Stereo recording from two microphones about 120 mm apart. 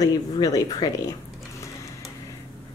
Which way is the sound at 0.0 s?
30° left (ahead or behind).